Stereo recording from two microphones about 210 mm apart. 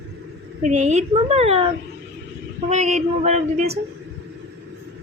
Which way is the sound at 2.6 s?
35° right (ahead or behind).